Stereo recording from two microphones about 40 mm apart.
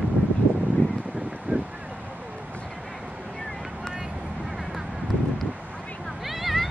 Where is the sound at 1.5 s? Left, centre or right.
Right.